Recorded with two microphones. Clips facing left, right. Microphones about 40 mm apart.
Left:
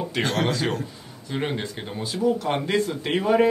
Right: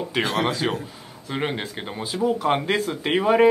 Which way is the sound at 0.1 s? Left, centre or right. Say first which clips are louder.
Right 2 dB; centre.